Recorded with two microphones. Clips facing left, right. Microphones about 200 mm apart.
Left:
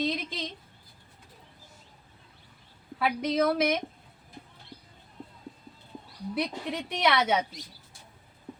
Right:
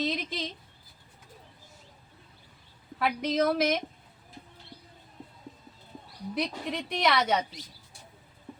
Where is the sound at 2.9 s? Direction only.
5° left (ahead or behind).